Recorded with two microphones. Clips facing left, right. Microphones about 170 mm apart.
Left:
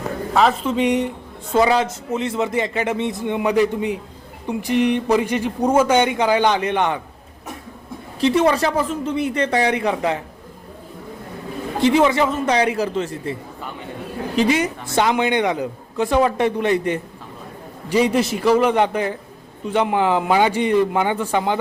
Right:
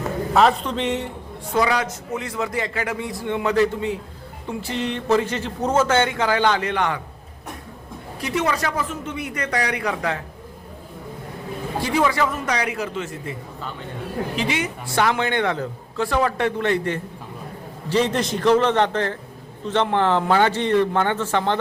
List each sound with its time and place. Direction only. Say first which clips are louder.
0.3 s speech: left 1 dB; centre (ahead or behind)
1.5 s a man's voice: left 4 dB; 25° left (ahead or behind)
8.2 s a man's voice: left 7 dB; 30° left (ahead or behind)
11.8 s a man's voice: left 5 dB; 20° left (ahead or behind)
14.3 s a woman's voice: left 9 dB; 40° left (ahead or behind)
14.8 s speech: left 2 dB; 20° left (ahead or behind)